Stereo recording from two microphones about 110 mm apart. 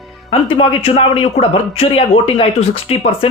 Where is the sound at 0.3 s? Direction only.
60° left (ahead or behind).